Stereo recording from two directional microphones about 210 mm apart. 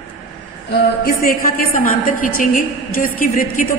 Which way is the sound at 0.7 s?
45° left (ahead or behind).